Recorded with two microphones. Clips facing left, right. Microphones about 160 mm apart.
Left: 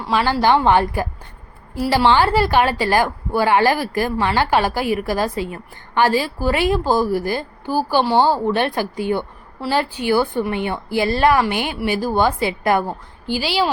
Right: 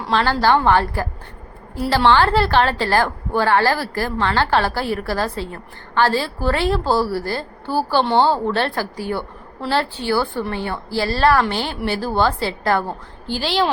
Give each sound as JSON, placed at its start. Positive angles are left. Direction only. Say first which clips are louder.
{"t": 0.0, "sound": "a woman's voice", "louder": "even", "side_deg": 10}
{"t": 1.7, "sound": "a woman's voice", "louder": "even", "side_deg": 5}